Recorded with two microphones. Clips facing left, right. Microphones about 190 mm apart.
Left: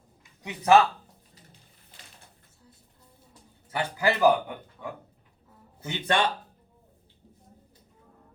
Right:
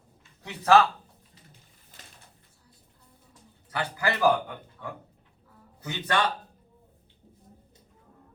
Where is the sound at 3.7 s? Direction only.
20° left (ahead or behind).